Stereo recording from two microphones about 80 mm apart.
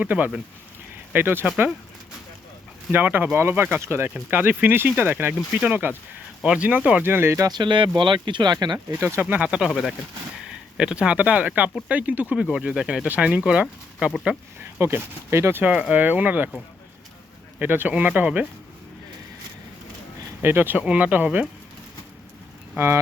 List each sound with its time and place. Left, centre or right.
0.0 s speech: right
2.9 s speech: right
7.1 s speech: right
7.4 s speech: right
9.0 s speech: right
9.2 s speech: centre
9.6 s speech: centre
14.8 s speech: right
15.7 s speech: centre
17.6 s speech: right
20.4 s speech: right